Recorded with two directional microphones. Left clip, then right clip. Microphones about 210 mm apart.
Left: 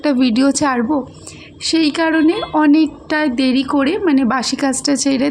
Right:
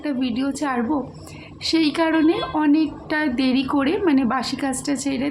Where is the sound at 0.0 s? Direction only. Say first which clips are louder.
Left 10 dB; 40° left (ahead or behind).